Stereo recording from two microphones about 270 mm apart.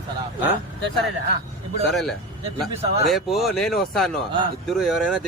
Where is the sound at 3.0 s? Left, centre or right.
Centre.